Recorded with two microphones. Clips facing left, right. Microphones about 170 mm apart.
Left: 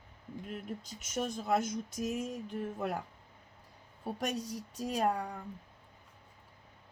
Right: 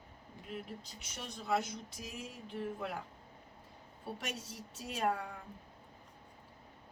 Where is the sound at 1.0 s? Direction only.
45° left (ahead or behind).